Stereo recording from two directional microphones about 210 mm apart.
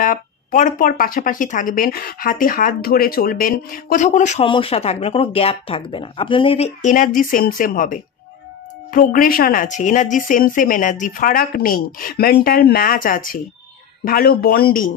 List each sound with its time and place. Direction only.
0.0 s speech: 40° left (ahead or behind)